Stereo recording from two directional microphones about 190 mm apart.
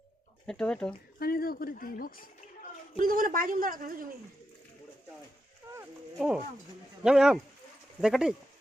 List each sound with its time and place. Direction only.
0.4 s speech: 5° left (ahead or behind)
1.2 s speech: 50° left (ahead or behind)
3.0 s a woman's voice: 45° right (ahead or behind)
6.1 s speech: 5° right (ahead or behind)